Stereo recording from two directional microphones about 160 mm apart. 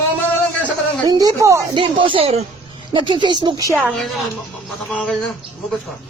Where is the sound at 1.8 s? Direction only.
30° right (ahead or behind).